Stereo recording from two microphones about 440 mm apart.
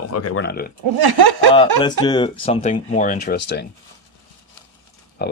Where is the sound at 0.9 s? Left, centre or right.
Right.